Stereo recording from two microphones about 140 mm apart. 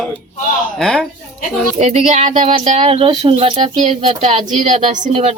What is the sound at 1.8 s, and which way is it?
A woman's voice, 55° right (ahead or behind).